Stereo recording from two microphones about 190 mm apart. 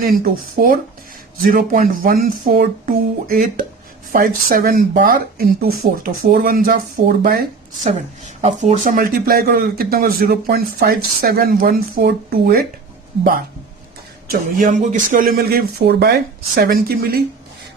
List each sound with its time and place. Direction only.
0.0 s a man's voice: 50° right (ahead or behind)
8.4 s a man's voice: 40° right (ahead or behind)
14.3 s a man's voice: 40° right (ahead or behind)